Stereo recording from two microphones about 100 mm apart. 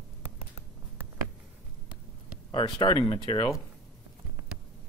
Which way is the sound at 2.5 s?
55° left (ahead or behind).